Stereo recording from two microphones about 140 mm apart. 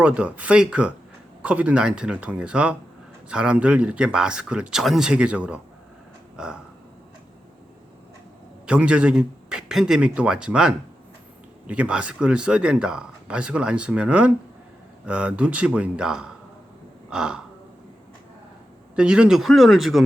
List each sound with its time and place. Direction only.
0.0 s speech: 10° right (ahead or behind)
6.3 s a sound: 5° right (ahead or behind)
8.6 s a man's voice: 10° right (ahead or behind)
18.9 s a man's voice: 5° right (ahead or behind)